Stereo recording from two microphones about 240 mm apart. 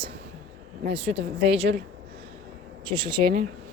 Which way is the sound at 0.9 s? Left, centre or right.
Right.